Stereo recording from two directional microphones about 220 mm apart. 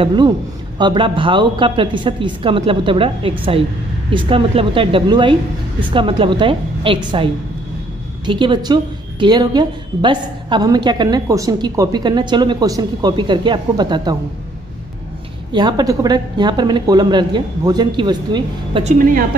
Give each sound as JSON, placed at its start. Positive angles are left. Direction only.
{"t": 0.0, "sound": "a woman's voice", "side_deg": -20}
{"t": 8.3, "sound": "a woman's voice", "side_deg": -20}
{"t": 15.5, "sound": "a woman's voice", "side_deg": -20}